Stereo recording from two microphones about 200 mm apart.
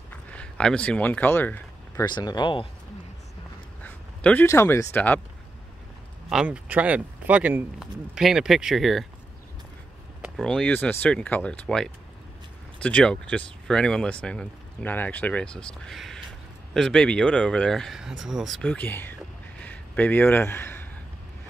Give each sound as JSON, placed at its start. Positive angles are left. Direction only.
{"t": 0.1, "sound": "a sound", "side_deg": 5}
{"t": 2.0, "sound": "speech", "side_deg": 20}
{"t": 3.8, "sound": "speech", "side_deg": 5}
{"t": 6.3, "sound": "speech", "side_deg": -5}
{"t": 10.2, "sound": "speech", "side_deg": 0}
{"t": 19.6, "sound": "a sound", "side_deg": 10}